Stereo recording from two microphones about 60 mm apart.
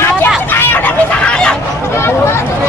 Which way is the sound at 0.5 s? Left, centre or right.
Left.